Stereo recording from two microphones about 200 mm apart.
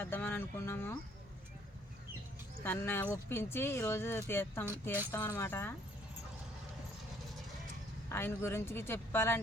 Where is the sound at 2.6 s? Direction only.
10° left (ahead or behind).